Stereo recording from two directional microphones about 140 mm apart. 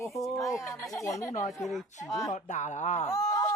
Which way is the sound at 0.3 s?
20° left (ahead or behind).